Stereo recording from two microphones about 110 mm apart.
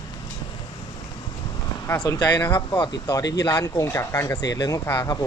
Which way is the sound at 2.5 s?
45° left (ahead or behind).